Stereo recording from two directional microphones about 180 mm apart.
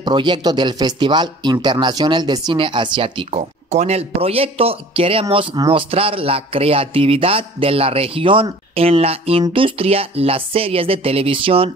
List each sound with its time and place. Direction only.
0.0 s speech: 25° right (ahead or behind)